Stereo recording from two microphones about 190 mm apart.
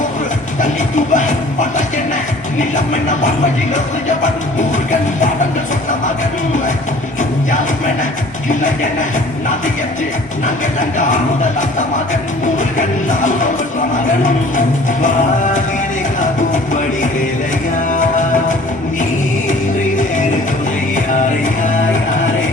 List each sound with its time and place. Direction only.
0.6 s music: 40° left (ahead or behind)
8.4 s music: 40° left (ahead or behind)
10.9 s music: 40° left (ahead or behind)
12.7 s music: 40° left (ahead or behind)
16.5 s music: 40° left (ahead or behind)
20.9 s music: 40° left (ahead or behind)